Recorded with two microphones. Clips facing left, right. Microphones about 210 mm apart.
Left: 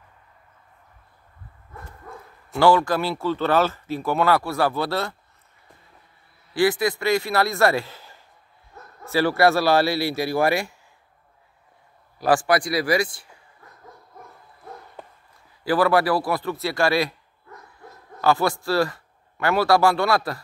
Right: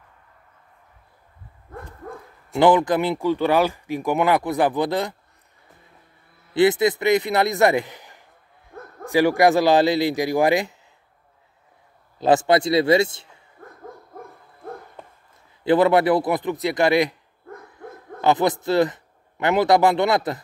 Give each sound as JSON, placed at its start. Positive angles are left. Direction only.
{"t": 2.5, "sound": "speech", "side_deg": -20}
{"t": 6.5, "sound": "a man's voice", "side_deg": -20}
{"t": 12.2, "sound": "a man's voice", "side_deg": -20}
{"t": 13.6, "sound": "hoot", "side_deg": -50}
{"t": 15.0, "sound": "a sound", "side_deg": 0}
{"t": 15.6, "sound": "a man's voice", "side_deg": -20}
{"t": 17.5, "sound": "bow-wow", "side_deg": -55}
{"t": 18.2, "sound": "a man's voice", "side_deg": -20}